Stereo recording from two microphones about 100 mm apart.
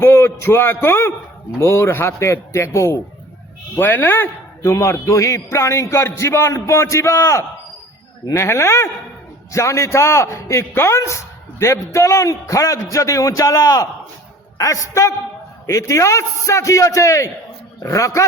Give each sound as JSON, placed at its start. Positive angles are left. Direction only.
{"t": 0.0, "sound": "a man's voice", "side_deg": 25}